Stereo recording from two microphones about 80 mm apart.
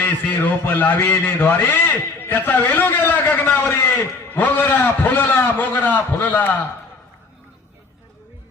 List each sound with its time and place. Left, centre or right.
0.0 s a man's voice: left